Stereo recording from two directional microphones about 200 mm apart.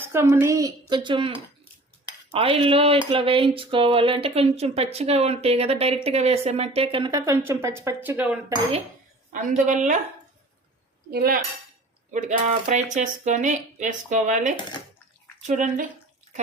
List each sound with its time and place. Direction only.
0.0 s a woman's voice: 10° right (ahead or behind)
2.3 s a woman's voice: 25° right (ahead or behind); by 8.5 s 10° right (ahead or behind)
9.6 s speech: 40° right (ahead or behind)
11.1 s cutlery: 50° right (ahead or behind)
12.1 s speech: 35° right (ahead or behind)